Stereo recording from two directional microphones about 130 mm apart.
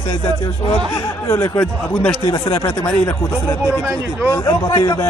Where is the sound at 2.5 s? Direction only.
25° left (ahead or behind).